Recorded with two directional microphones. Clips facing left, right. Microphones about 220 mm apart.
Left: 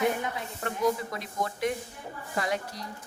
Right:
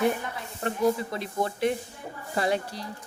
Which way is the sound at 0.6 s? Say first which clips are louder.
Right 3 dB; 30° right (ahead or behind).